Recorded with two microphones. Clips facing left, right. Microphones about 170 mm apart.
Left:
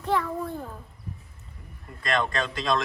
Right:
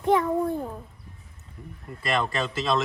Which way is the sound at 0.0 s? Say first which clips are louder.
Right 5 dB; 20° right (ahead or behind).